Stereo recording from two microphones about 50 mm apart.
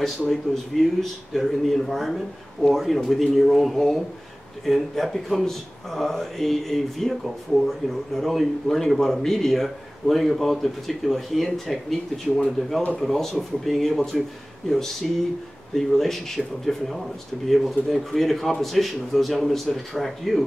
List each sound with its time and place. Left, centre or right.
0.8 s a man's voice: centre
8.2 s a man's voice: centre